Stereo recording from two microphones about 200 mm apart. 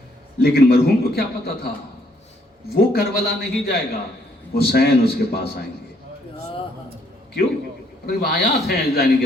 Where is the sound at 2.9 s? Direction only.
50° left (ahead or behind).